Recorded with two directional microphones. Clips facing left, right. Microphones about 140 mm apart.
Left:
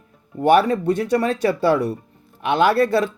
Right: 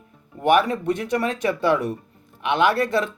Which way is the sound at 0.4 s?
35° left (ahead or behind).